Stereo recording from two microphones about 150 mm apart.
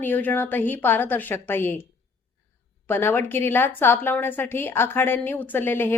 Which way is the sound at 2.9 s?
15° left (ahead or behind).